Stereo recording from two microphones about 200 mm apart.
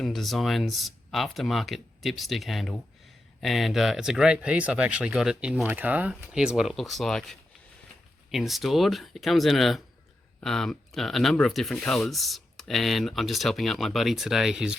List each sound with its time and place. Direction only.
0.0 s speech: centre (ahead or behind)